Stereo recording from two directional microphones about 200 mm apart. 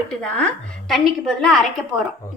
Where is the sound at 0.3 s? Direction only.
5° left (ahead or behind).